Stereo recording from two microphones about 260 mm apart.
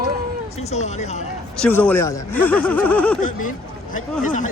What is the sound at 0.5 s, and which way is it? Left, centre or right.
Speech, left.